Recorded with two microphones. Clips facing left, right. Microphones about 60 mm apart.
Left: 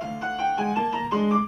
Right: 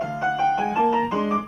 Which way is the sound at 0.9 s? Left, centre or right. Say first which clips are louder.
Right 1 dB; right.